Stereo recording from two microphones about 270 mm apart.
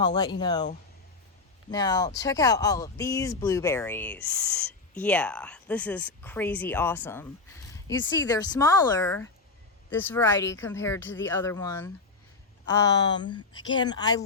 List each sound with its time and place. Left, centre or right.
0.0 s speech: centre
1.7 s speech: centre